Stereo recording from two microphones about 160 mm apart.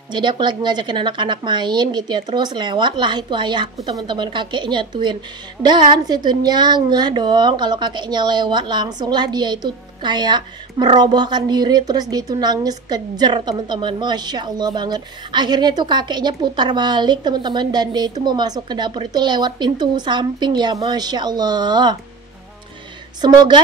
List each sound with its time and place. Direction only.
0.1 s a woman's voice: 30° right (ahead or behind)
23.2 s a woman's voice: 25° right (ahead or behind)